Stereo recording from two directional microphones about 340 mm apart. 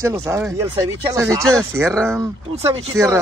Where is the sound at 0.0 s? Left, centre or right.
Centre.